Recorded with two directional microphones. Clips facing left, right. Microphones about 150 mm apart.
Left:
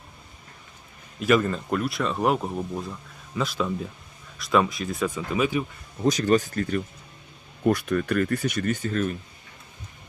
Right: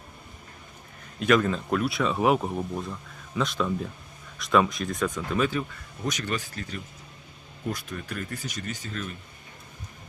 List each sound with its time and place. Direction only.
1.2 s speech: 5° left (ahead or behind)
6.1 s speech: 35° left (ahead or behind)
7.6 s speech: 65° left (ahead or behind); by 9.1 s 50° left (ahead or behind)